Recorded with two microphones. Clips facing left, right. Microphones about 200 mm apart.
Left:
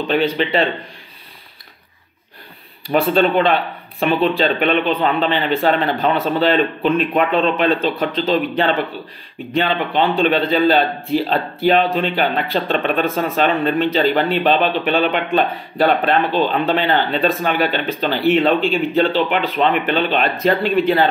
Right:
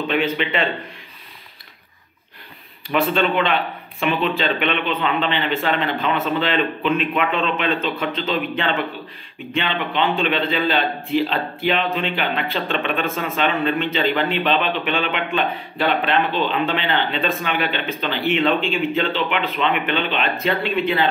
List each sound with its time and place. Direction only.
0.1 s a man's voice: 35° left (ahead or behind)
2.9 s a man's voice: 35° left (ahead or behind)